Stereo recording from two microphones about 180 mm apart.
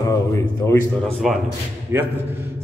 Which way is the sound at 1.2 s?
Centre (ahead or behind).